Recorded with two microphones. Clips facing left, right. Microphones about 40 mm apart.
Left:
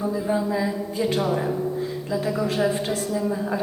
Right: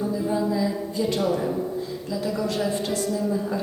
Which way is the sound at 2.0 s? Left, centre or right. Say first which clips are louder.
Left 2 dB; left.